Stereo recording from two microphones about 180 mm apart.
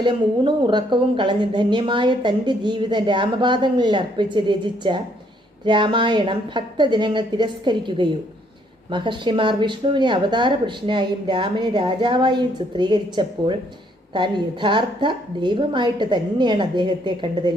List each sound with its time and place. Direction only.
0.0 s speech: 25° right (ahead or behind)